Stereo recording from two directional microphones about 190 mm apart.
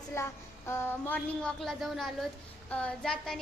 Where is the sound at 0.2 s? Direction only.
15° left (ahead or behind).